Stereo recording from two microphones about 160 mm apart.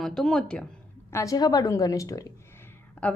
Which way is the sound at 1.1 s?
20° left (ahead or behind).